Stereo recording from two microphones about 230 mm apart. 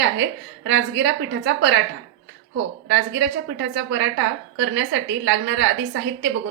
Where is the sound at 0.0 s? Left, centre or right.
Right.